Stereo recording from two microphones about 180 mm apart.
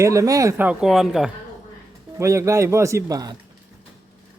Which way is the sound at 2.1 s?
15° right (ahead or behind).